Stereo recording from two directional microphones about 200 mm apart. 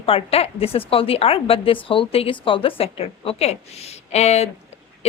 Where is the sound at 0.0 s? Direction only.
30° left (ahead or behind).